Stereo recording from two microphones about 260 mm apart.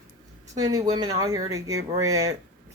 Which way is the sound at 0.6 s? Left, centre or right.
Centre.